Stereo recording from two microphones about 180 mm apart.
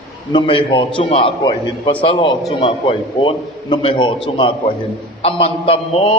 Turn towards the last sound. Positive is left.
turn(degrees=30)  # may be behind; listen again after turning